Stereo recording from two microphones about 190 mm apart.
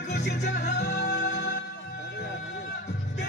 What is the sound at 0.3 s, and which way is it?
Music, 60° left (ahead or behind).